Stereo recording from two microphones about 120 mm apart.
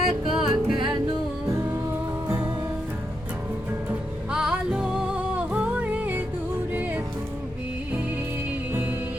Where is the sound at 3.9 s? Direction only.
5° right (ahead or behind).